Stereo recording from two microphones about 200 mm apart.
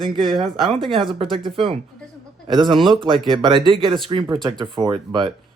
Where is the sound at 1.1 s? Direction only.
25° right (ahead or behind).